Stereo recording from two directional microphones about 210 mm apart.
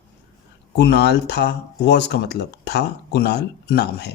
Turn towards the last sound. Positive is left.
turn(degrees=50)  # may be behind; listen again after turning